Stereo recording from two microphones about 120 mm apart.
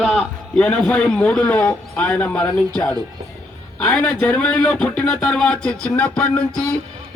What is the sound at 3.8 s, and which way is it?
Speech, 5° left (ahead or behind).